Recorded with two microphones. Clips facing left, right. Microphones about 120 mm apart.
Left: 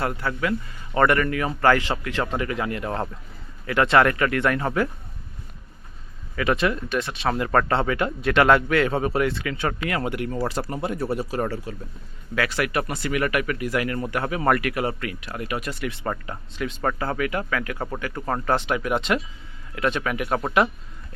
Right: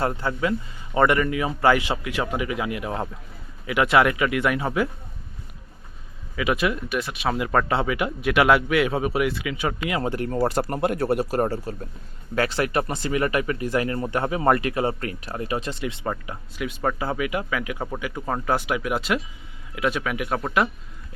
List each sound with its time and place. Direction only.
0.0 s speech: 25° right (ahead or behind); by 4.9 s 10° right (ahead or behind)
6.3 s speech: 5° right (ahead or behind)
9.8 s speech: 20° right (ahead or behind)
10.1 s speech: 35° right (ahead or behind); by 11.3 s 60° right (ahead or behind)
11.3 s speech: 35° right (ahead or behind)
16.0 s speech: 5° right (ahead or behind)